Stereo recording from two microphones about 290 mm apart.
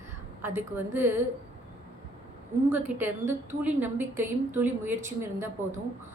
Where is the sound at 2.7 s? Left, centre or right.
Centre.